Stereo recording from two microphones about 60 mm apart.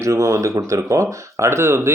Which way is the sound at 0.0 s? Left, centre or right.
Right.